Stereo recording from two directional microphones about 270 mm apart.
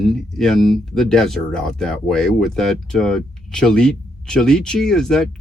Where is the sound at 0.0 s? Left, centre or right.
Centre.